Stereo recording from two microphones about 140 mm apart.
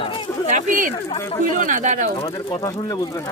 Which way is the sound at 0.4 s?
70° right (ahead or behind).